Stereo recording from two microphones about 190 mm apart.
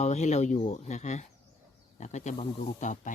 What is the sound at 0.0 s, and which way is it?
Speech, 35° left (ahead or behind).